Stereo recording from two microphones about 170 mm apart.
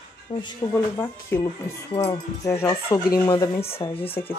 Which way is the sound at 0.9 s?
15° left (ahead or behind).